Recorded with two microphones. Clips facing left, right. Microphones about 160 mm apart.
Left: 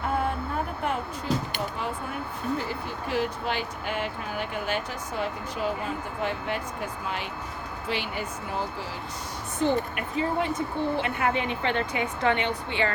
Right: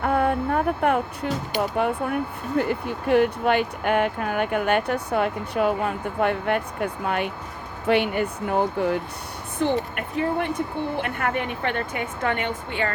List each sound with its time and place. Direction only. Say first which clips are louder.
0.0 s music: right 6 dB; 55° right (ahead or behind)
1.7 s a woman's voice: right 9 dB; 60° right (ahead or behind)